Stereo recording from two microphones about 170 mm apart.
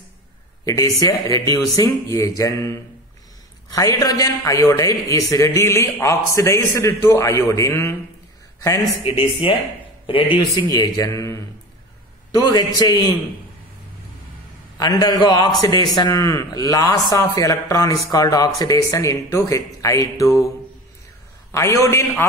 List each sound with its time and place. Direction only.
0.7 s a man's voice: 20° left (ahead or behind)
9.0 s a man's voice: 30° left (ahead or behind)
14.8 s a man's voice: 20° left (ahead or behind)
21.5 s a man's voice: 15° left (ahead or behind)